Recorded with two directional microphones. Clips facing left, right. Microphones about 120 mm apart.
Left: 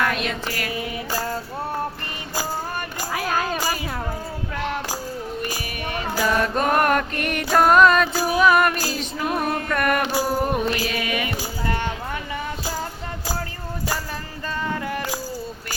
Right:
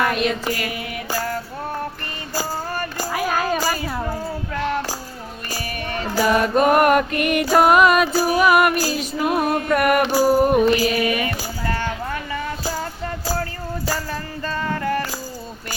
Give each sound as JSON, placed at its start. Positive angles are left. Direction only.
{"t": 0.0, "sound": "mantra", "side_deg": -5}
{"t": 3.1, "sound": "music", "side_deg": -5}
{"t": 5.5, "sound": "music", "side_deg": 10}
{"t": 6.1, "sound": "music", "side_deg": -10}
{"t": 11.3, "sound": "a sound", "side_deg": 20}
{"t": 14.6, "sound": "music", "side_deg": 10}